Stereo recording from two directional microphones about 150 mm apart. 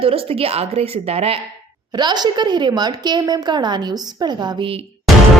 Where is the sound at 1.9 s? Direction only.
30° right (ahead or behind).